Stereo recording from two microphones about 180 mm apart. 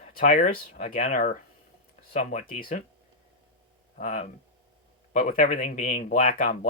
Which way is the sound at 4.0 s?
40° left (ahead or behind).